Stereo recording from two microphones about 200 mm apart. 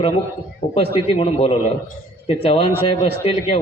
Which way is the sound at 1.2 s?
30° left (ahead or behind).